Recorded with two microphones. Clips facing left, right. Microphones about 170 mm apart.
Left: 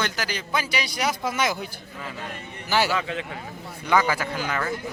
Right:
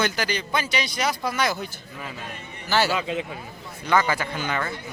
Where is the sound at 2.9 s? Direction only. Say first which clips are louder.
Right 1 dB; 15° right (ahead or behind).